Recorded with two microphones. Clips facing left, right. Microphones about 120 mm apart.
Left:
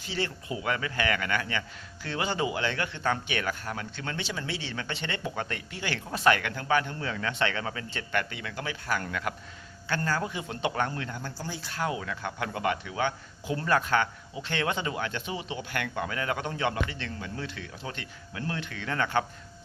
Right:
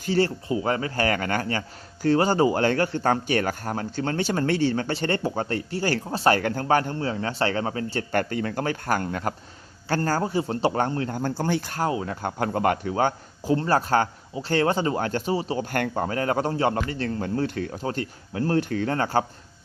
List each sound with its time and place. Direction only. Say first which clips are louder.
0.0 s speech: right 10 dB; 45° right (ahead or behind)
0.4 s speech: right 6 dB; 35° right (ahead or behind)
11.2 s speech: right 12 dB; 55° right (ahead or behind)
11.7 s speech: right 5 dB; 35° right (ahead or behind)